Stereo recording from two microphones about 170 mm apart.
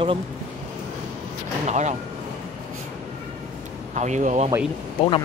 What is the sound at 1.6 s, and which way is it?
Speech, 45° right (ahead or behind).